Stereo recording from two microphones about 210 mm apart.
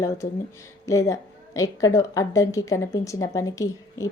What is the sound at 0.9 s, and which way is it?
A woman's voice, 15° left (ahead or behind).